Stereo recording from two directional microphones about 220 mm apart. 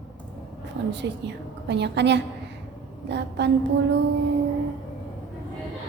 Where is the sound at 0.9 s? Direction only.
50° right (ahead or behind).